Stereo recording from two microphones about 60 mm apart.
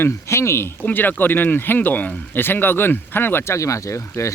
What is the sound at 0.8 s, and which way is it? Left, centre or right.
Speech, left.